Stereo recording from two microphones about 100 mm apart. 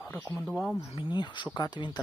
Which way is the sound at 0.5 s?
5° left (ahead or behind).